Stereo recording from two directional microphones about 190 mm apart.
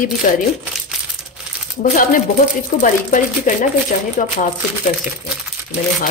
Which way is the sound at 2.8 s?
45° left (ahead or behind).